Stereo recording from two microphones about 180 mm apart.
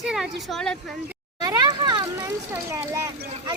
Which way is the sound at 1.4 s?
20° right (ahead or behind).